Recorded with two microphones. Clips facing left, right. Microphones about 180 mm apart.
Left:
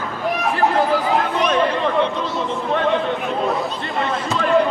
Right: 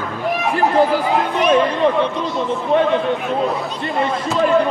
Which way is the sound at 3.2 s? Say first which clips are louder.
Right 1 dB; centre (ahead or behind).